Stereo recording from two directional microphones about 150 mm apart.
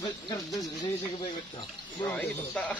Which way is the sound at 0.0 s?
25° left (ahead or behind).